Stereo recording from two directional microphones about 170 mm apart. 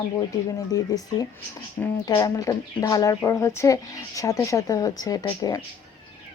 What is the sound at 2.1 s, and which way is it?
A woman's voice, 20° left (ahead or behind).